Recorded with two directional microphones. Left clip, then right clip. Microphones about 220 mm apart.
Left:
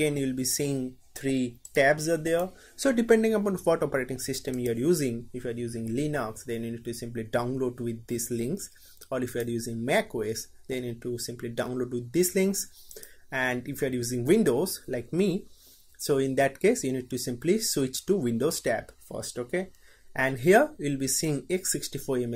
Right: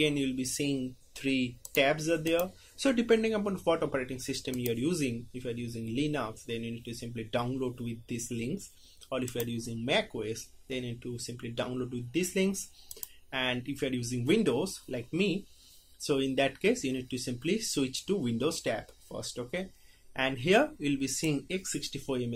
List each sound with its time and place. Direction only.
0.0 s speech: 35° left (ahead or behind)
9.6 s speech: 35° left (ahead or behind)